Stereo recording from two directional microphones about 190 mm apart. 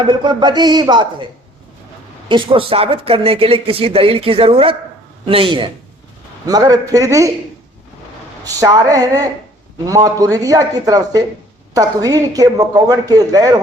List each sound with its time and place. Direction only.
0.0 s speech: 25° right (ahead or behind)
2.3 s a man's voice: 25° right (ahead or behind)
8.4 s speech: 20° right (ahead or behind)